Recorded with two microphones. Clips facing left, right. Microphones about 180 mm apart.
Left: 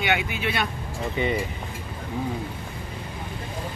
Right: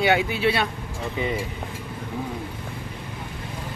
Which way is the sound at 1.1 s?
Centre (ahead or behind).